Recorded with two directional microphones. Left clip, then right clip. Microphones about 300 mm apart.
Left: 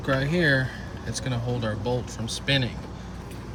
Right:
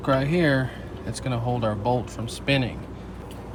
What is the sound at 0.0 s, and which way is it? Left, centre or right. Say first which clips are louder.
Speech: right 2 dB; centre.